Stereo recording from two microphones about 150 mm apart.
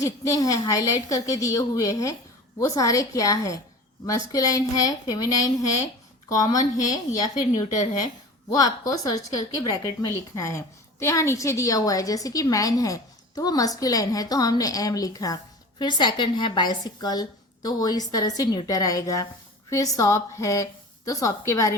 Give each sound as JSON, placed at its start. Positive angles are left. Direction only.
{"t": 0.0, "sound": "a woman's voice", "side_deg": 25}